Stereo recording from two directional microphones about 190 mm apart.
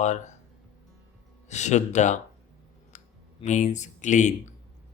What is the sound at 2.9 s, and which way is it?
Clicking, 40° left (ahead or behind).